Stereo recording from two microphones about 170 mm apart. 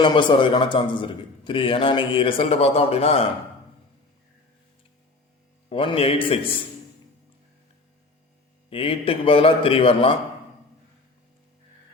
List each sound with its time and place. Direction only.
0.0 s a man's voice: 25° left (ahead or behind)
5.6 s a man's voice: 30° left (ahead or behind)
8.7 s a man's voice: 35° left (ahead or behind)